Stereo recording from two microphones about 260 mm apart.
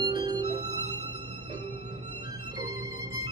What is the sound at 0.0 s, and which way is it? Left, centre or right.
Music, centre.